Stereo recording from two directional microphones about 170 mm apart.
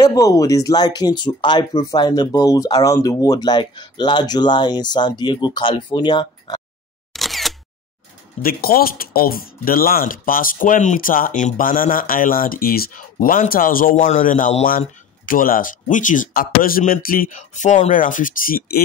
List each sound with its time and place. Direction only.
0.0 s speech: 20° left (ahead or behind)
7.1 s single-lens reflex camera: centre (ahead or behind)
8.4 s speech: 60° left (ahead or behind)